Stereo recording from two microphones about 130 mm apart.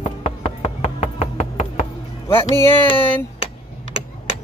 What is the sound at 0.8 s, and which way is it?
Music, 55° left (ahead or behind).